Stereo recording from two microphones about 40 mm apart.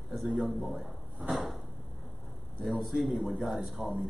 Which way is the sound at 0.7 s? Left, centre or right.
Centre.